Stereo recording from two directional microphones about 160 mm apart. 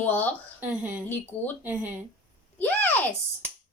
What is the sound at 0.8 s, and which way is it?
A woman's voice, 10° right (ahead or behind).